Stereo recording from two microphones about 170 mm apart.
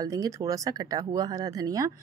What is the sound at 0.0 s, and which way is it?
Speech, 20° right (ahead or behind).